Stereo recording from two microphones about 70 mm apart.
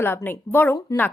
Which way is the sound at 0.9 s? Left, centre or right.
Left.